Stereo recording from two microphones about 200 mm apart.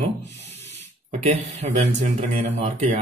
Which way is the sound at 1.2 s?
35° right (ahead or behind).